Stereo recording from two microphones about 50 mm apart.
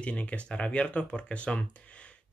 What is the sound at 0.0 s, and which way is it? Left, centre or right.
Speech, left.